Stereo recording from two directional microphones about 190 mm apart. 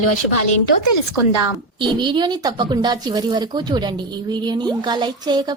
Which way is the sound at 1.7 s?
25° right (ahead or behind).